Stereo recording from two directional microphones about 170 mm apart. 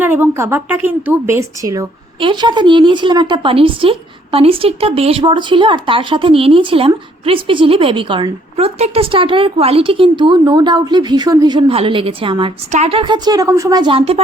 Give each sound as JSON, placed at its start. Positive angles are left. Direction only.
{"t": 0.0, "sound": "a woman's voice", "side_deg": -10}